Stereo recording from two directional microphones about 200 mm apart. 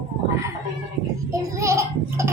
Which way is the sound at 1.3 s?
15° right (ahead or behind).